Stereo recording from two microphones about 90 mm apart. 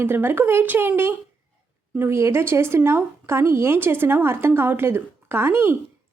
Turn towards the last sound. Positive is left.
turn(degrees=-25)  # may be behind; listen again after turning